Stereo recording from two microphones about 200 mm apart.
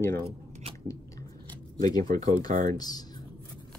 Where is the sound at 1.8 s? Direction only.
20° left (ahead or behind).